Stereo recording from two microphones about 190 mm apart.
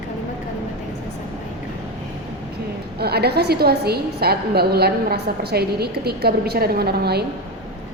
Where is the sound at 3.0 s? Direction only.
55° right (ahead or behind).